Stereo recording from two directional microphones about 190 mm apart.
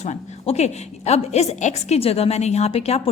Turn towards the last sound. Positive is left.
turn(degrees=35)  # may be behind; listen again after turning